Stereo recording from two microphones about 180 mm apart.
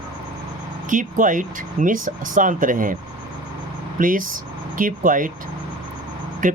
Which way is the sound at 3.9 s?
50° right (ahead or behind).